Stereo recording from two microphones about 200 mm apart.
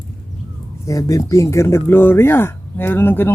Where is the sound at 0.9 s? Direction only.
15° left (ahead or behind).